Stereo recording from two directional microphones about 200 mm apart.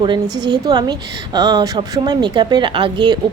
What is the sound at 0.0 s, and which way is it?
A woman's voice, 20° right (ahead or behind).